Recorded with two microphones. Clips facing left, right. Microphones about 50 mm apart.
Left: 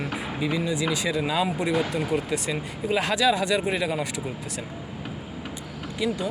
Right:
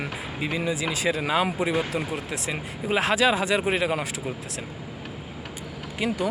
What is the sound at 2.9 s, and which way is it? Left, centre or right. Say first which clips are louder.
Speech: right 1 dB; right.